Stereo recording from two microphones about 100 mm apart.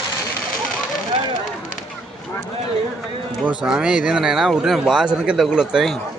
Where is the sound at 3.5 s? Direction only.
10° right (ahead or behind).